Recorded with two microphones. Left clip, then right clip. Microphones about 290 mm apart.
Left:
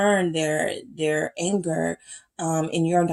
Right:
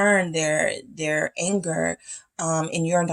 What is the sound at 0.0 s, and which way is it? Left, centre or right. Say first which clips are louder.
Speech: right 1 dB; right.